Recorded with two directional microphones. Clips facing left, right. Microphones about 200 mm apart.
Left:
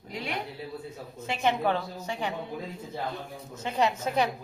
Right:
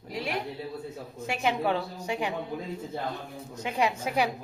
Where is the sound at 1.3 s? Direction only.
10° right (ahead or behind).